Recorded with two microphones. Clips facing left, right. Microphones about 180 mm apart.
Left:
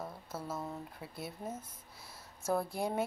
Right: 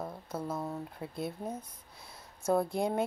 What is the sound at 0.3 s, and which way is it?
Speech, centre (ahead or behind).